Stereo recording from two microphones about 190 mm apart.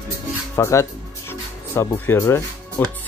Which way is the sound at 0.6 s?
15° left (ahead or behind).